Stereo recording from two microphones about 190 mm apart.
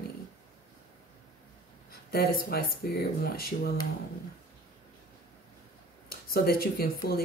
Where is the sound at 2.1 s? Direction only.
55° left (ahead or behind).